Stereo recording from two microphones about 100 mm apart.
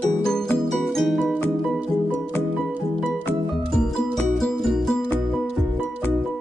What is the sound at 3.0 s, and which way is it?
Music, centre (ahead or behind).